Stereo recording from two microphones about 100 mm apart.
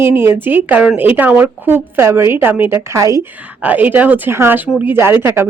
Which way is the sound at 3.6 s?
15° right (ahead or behind).